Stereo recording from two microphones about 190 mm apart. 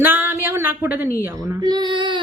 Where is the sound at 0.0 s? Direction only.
10° right (ahead or behind).